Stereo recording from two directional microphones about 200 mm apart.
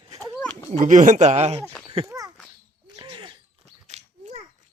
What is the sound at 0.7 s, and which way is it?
Speech, 35° right (ahead or behind).